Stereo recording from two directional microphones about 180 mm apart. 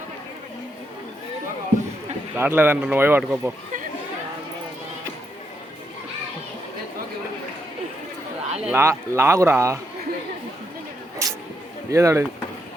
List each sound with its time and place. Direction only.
2.3 s speech: 10° right (ahead or behind)
8.4 s a sound: 35° right (ahead or behind)
8.7 s speech: 15° right (ahead or behind)
11.2 s music: 15° right (ahead or behind)
11.9 s speech: 15° right (ahead or behind)